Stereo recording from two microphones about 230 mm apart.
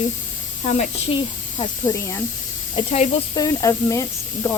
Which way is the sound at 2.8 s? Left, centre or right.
Left.